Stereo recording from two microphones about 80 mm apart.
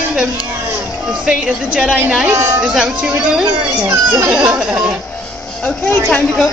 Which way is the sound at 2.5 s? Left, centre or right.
Centre.